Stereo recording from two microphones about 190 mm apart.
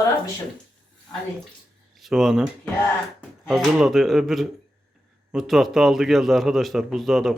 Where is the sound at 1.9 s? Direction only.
Centre (ahead or behind).